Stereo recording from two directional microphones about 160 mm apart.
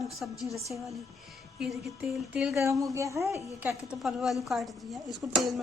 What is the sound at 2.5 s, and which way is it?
A woman's voice, 20° right (ahead or behind).